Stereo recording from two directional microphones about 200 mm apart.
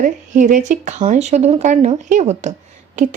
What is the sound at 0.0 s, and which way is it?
A woman's voice, 40° right (ahead or behind).